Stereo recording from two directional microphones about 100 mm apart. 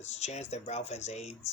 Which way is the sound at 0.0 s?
90° left.